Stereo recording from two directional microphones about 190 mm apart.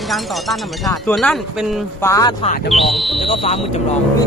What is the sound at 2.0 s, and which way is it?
Speech, 15° left (ahead or behind).